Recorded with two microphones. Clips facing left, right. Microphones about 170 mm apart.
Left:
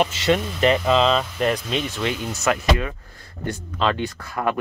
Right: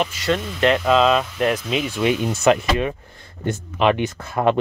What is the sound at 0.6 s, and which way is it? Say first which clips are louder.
Speech: right 4 dB; centre (ahead or behind).